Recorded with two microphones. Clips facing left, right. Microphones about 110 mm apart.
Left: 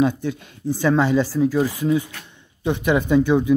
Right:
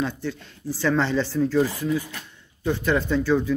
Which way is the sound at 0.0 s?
15° left (ahead or behind).